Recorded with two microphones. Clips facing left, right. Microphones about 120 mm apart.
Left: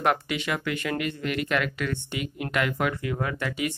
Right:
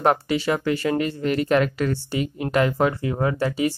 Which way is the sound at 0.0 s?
35° right (ahead or behind).